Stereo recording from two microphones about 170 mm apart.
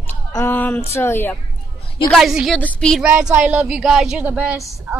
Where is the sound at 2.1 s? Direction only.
Centre (ahead or behind).